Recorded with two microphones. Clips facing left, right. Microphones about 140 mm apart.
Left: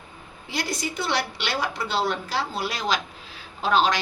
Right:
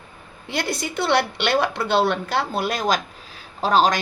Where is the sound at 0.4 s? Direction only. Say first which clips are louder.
Right 3 dB; 60° right (ahead or behind).